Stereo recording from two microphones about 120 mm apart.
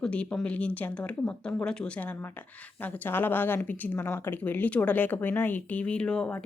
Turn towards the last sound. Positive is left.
turn(degrees=10)  # may be behind; listen again after turning